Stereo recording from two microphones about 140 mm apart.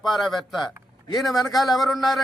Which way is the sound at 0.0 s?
Centre (ahead or behind).